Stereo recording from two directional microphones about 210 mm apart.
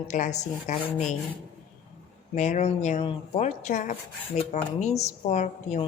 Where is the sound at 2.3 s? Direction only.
35° left (ahead or behind).